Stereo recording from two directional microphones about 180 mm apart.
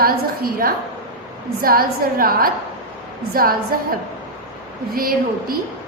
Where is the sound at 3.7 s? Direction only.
55° right (ahead or behind).